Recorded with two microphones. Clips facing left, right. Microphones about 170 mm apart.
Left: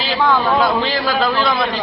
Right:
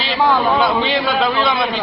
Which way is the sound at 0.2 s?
15° right (ahead or behind).